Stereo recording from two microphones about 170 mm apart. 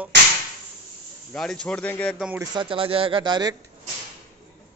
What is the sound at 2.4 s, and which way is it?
Speech, 25° right (ahead or behind).